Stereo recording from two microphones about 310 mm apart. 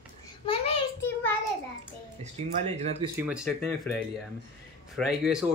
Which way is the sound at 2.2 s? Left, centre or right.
Right.